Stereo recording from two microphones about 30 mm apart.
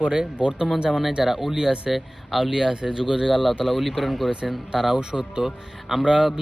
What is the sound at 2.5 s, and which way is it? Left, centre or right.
Speech, centre.